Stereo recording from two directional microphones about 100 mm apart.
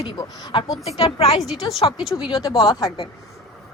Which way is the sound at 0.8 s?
80° left.